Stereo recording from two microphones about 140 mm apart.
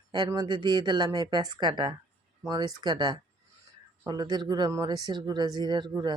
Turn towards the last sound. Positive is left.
turn(degrees=-25)  # may be behind; listen again after turning